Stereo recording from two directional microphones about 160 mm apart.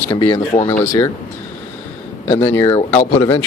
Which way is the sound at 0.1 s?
25° left (ahead or behind).